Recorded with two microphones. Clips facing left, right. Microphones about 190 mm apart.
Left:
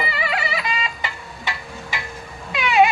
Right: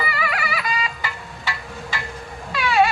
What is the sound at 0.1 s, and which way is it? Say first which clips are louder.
Music: left 1 dB; 25° left (ahead or behind).